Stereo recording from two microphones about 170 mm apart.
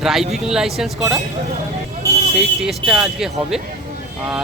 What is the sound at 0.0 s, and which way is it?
Speech, centre (ahead or behind).